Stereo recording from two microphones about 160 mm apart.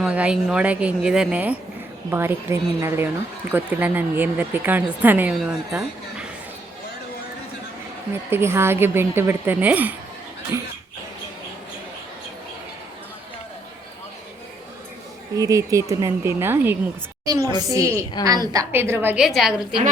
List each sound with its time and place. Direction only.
0.0 s speech: 5° right (ahead or behind)
8.3 s speech: 15° right (ahead or behind)
15.4 s a woman's voice: 20° right (ahead or behind); by 19.6 s centre (ahead or behind)